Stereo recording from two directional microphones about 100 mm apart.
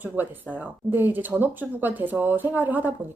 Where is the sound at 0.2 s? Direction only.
20° right (ahead or behind).